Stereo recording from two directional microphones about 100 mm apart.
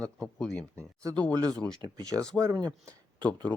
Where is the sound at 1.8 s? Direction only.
40° right (ahead or behind).